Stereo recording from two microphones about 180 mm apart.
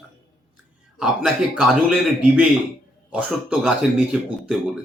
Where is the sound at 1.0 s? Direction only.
5° right (ahead or behind).